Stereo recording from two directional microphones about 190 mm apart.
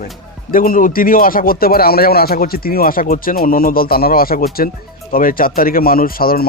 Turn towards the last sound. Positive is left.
turn(degrees=50)  # may be behind; listen again after turning